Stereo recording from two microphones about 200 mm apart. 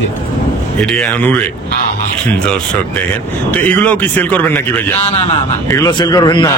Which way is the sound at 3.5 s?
10° left (ahead or behind).